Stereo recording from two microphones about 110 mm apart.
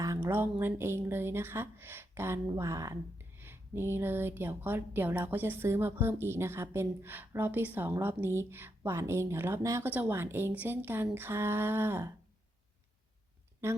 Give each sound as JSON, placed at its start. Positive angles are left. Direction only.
{"t": 0.2, "sound": "speech", "side_deg": -15}